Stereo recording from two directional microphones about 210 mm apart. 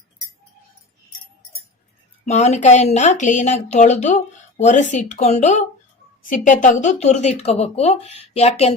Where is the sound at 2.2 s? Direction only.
35° left (ahead or behind).